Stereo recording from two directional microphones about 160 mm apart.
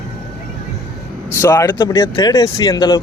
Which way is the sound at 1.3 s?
15° left (ahead or behind).